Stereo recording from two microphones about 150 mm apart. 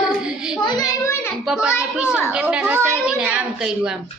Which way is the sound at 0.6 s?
30° left (ahead or behind).